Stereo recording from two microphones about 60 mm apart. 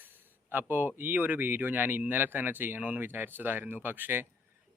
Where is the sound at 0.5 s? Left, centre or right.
Right.